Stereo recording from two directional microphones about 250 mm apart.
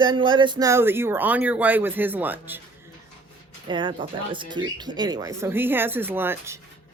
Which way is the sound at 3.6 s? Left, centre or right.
Centre.